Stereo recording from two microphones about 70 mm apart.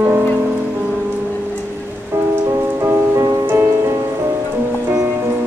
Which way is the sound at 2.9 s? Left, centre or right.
Right.